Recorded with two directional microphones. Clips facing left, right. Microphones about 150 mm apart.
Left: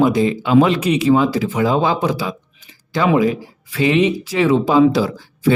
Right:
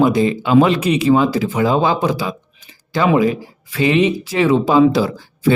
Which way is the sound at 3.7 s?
45° right (ahead or behind).